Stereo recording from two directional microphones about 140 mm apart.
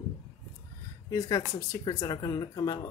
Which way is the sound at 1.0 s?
25° left (ahead or behind).